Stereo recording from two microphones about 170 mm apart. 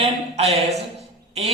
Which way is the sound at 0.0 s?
40° right (ahead or behind).